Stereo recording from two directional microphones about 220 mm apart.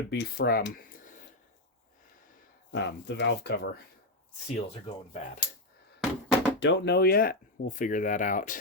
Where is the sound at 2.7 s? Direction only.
50° left (ahead or behind).